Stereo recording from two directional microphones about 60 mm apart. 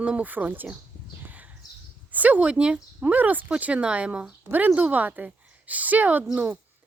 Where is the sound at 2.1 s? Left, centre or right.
Right.